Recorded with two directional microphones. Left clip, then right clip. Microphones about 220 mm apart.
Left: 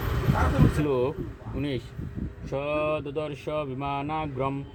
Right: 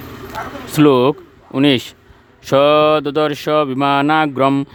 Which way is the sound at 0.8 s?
60° right (ahead or behind).